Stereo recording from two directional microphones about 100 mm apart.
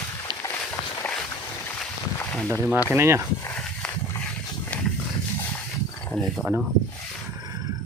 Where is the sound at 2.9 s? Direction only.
25° right (ahead or behind).